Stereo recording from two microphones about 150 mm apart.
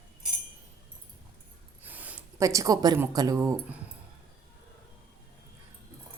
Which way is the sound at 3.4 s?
15° right (ahead or behind).